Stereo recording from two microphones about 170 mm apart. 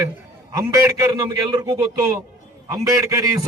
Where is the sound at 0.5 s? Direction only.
20° right (ahead or behind).